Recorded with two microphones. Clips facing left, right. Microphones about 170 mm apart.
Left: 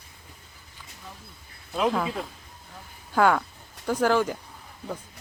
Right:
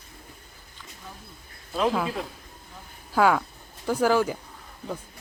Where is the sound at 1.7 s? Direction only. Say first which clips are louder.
Even; centre (ahead or behind).